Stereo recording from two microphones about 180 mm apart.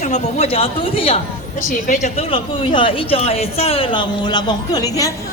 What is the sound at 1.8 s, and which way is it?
A woman's voice, 45° left (ahead or behind).